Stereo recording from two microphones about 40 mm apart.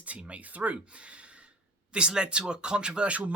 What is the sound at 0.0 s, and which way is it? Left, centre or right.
Speech, right.